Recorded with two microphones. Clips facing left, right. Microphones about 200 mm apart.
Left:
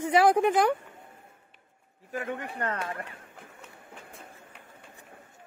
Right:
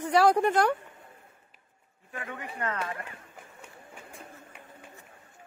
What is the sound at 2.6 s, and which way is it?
Speech, 35° left (ahead or behind).